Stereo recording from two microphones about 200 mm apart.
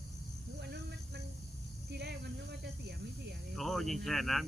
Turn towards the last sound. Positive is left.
turn(degrees=0)  # may be behind; listen again after turning